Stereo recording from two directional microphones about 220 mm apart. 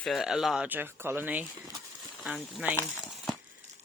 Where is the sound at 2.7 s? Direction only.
Centre (ahead or behind).